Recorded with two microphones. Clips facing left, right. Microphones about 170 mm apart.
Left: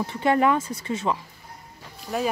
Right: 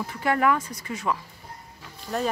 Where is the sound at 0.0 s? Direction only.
25° left (ahead or behind).